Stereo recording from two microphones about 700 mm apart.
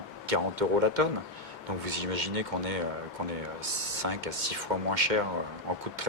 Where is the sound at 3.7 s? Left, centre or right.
Right.